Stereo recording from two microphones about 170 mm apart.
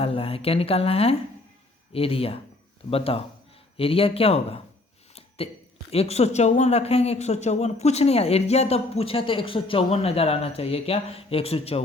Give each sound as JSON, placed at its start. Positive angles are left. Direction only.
{"t": 0.0, "sound": "speech", "side_deg": 35}
{"t": 5.9, "sound": "speech", "side_deg": 35}